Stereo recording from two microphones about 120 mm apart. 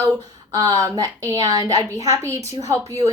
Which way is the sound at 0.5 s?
30° right (ahead or behind).